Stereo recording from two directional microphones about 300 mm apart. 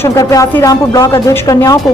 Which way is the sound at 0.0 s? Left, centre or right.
Centre.